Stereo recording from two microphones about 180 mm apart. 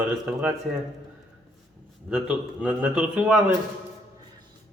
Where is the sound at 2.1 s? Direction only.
5° right (ahead or behind).